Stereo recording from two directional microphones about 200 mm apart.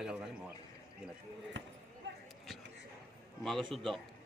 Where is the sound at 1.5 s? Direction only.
65° right (ahead or behind).